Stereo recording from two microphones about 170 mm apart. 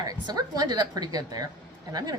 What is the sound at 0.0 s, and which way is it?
A woman's voice, 25° right (ahead or behind).